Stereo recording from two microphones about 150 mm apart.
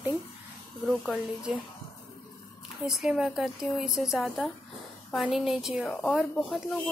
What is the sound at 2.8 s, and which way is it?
Speech, 5° right (ahead or behind).